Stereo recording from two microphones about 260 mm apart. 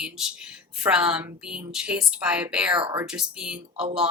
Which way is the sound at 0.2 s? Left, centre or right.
Centre.